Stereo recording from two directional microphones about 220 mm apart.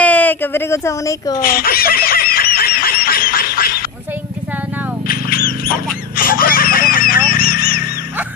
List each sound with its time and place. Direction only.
0.0 s speech: 5° left (ahead or behind)
1.4 s honk: 40° left (ahead or behind)
5.0 s a sound: 40° left (ahead or behind)
6.1 s laughter: 40° left (ahead or behind)